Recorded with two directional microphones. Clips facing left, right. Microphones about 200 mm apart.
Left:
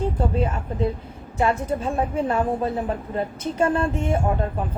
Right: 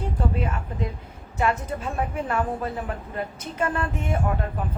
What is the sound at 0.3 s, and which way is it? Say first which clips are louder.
A woman's voice: left 5 dB; 30° left (ahead or behind).